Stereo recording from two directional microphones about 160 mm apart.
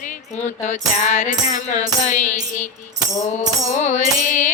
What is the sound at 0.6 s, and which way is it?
Music, 45° left (ahead or behind).